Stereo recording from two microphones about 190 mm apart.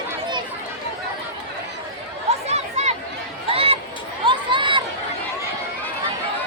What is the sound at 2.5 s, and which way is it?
Chatter, 35° right (ahead or behind).